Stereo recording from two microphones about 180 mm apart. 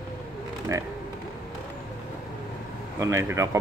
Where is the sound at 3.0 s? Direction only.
15° right (ahead or behind).